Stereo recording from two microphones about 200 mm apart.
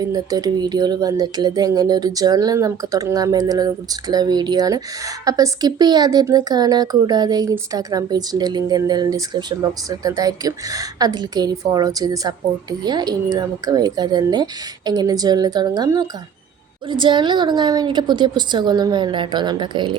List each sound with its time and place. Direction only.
0.0 s speech: 20° right (ahead or behind)